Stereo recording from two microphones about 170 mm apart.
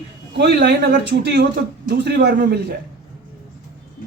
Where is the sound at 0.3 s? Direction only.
75° right (ahead or behind).